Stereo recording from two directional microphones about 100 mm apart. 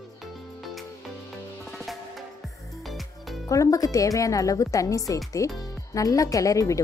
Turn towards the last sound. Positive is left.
turn(degrees=35)  # may be behind; listen again after turning